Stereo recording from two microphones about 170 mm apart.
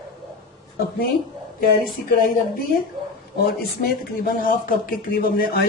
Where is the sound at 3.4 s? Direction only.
65° left (ahead or behind).